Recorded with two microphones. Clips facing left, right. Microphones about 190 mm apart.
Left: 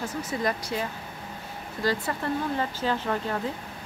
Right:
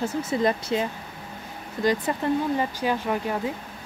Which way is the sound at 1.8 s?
20° right (ahead or behind).